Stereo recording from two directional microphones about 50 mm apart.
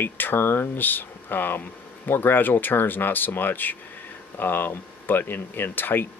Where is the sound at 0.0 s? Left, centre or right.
Left.